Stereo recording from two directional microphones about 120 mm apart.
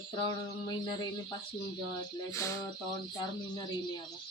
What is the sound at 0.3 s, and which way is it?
Speech, 35° left (ahead or behind).